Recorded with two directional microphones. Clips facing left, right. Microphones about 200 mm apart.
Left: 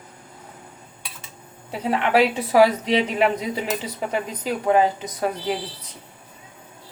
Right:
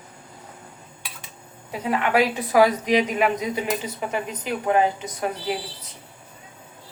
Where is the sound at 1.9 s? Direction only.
30° left (ahead or behind).